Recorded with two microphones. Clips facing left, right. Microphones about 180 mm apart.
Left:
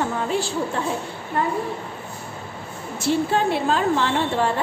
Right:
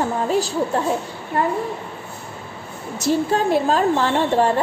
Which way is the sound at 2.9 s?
40° right (ahead or behind).